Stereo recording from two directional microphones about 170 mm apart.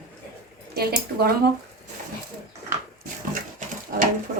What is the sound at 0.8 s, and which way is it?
Speech, 65° right (ahead or behind).